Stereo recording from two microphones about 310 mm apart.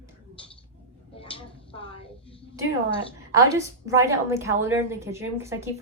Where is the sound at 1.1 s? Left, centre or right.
Centre.